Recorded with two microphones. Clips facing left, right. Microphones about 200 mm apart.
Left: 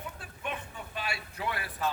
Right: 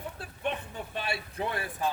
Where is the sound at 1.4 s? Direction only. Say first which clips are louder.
Right 2 dB; 25° right (ahead or behind).